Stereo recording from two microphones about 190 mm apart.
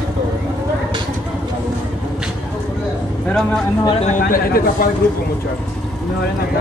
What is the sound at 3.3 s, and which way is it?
Speech, 5° left (ahead or behind).